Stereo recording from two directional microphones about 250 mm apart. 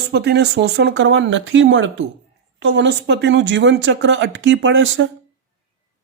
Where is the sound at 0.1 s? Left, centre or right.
Right.